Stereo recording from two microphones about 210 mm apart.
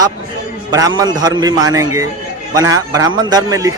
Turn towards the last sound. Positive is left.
turn(degrees=-15)  # may be behind; listen again after turning